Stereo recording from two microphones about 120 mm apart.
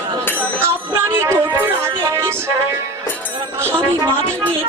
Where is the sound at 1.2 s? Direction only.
20° right (ahead or behind).